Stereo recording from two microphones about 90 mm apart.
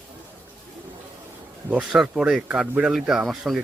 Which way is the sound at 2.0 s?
5° right (ahead or behind).